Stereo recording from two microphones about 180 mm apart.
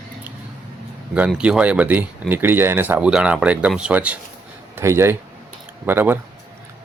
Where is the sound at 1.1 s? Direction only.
5° right (ahead or behind).